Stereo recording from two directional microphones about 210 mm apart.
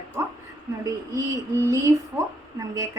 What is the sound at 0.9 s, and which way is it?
A woman's voice, 15° right (ahead or behind).